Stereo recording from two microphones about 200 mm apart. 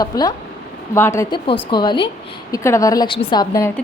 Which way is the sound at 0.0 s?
20° left (ahead or behind).